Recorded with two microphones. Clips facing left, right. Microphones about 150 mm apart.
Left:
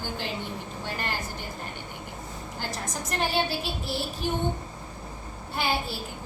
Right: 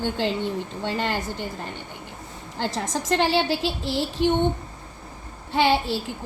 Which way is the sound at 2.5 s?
90° right.